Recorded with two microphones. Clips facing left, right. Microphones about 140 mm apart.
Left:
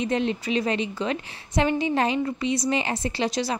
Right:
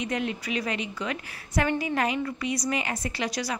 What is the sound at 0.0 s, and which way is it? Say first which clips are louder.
A woman's voice: left 5 dB; 30° left (ahead or behind).